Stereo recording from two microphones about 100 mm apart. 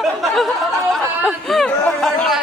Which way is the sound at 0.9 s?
5° left (ahead or behind).